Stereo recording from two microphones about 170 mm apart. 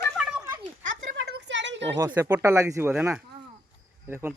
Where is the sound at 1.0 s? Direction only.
80° right.